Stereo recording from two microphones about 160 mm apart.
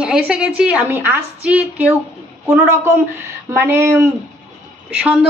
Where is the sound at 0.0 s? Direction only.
5° right (ahead or behind).